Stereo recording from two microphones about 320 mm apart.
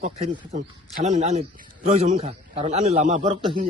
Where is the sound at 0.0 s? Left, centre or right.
Centre.